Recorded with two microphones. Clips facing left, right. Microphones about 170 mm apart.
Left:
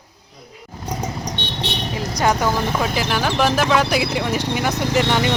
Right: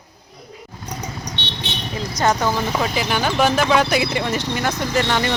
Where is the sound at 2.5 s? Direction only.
Centre (ahead or behind).